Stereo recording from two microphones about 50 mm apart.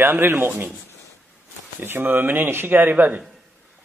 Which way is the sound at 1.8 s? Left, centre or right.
Right.